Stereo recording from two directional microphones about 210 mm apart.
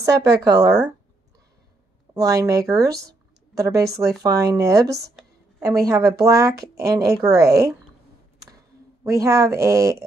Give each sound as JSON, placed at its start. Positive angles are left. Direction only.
{"t": 0.3, "sound": "a woman's voice", "side_deg": -15}
{"t": 2.1, "sound": "a woman's voice", "side_deg": -15}
{"t": 6.5, "sound": "speech", "side_deg": -50}
{"t": 6.8, "sound": "a woman's voice", "side_deg": -15}
{"t": 9.0, "sound": "a woman's voice", "side_deg": -15}